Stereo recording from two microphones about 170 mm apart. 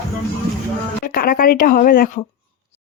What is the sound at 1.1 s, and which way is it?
Speech, 60° left (ahead or behind).